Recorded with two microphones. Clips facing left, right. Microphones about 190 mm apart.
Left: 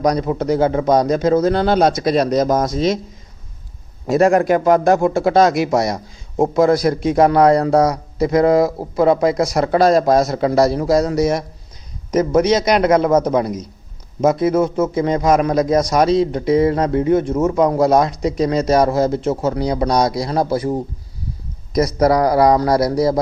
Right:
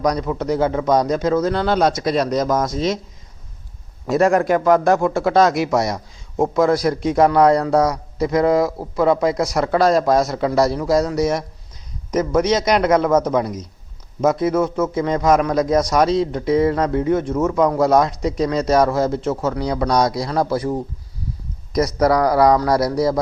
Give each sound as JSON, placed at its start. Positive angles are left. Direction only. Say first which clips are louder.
{"t": 0.0, "sound": "a man's voice", "louder": "left 3 dB", "side_deg": 25}
{"t": 2.7, "sound": "speech", "louder": "left 3 dB", "side_deg": 15}
{"t": 4.0, "sound": "a man's voice", "louder": "left 2 dB", "side_deg": 20}
{"t": 21.8, "sound": "a man's voice", "louder": "left 2 dB", "side_deg": 25}